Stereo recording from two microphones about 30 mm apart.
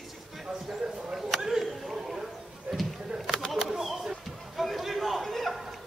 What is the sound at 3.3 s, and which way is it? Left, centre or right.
Bird, centre.